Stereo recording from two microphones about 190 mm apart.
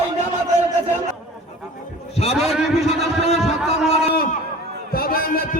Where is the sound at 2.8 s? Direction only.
35° left (ahead or behind).